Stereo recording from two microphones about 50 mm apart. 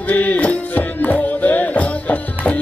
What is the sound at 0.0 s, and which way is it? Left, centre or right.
Music, left.